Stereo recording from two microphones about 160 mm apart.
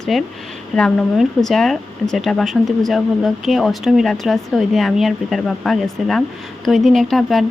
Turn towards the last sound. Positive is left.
turn(degrees=0)  # may be behind; listen again after turning